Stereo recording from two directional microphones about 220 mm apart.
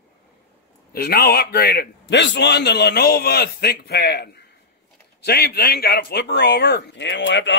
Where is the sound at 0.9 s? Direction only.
45° left (ahead or behind).